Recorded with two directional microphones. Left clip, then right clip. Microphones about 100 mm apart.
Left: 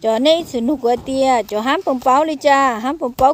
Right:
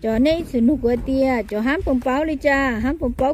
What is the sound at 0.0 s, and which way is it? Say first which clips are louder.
A woman's voice: left 5 dB; 30° right (ahead or behind).